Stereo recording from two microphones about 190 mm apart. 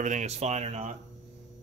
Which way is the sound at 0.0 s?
40° right (ahead or behind).